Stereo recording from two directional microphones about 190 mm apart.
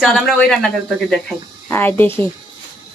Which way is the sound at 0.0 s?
Centre (ahead or behind).